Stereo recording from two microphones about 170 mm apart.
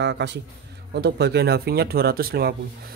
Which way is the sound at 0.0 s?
90° right.